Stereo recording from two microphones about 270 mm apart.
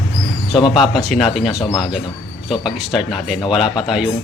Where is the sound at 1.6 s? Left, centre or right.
Centre.